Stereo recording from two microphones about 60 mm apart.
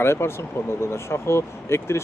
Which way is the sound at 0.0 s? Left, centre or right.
Left.